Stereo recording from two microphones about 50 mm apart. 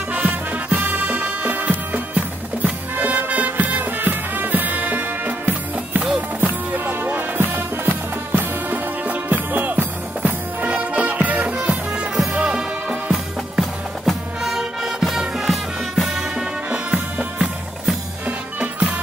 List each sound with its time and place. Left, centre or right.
0.1 s music: right; by 12.9 s centre
13.1 s music: centre
16.6 s music: right